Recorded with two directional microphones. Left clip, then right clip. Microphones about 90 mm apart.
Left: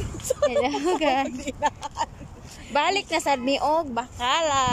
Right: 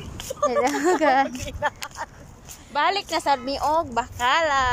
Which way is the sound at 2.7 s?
10° left (ahead or behind).